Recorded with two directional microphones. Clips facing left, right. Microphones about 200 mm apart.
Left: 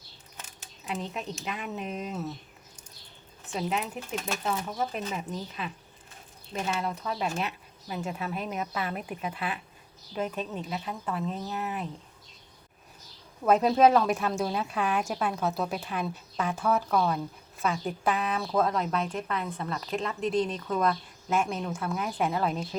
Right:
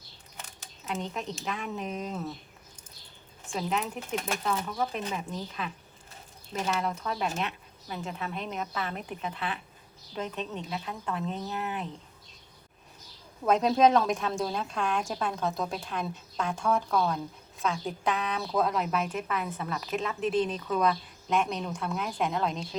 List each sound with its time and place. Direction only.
0.9 s a woman's voice: centre (ahead or behind)
3.5 s a woman's voice: 5° left (ahead or behind)
4.9 s a woman's voice: centre (ahead or behind)
13.4 s a woman's voice: 5° left (ahead or behind)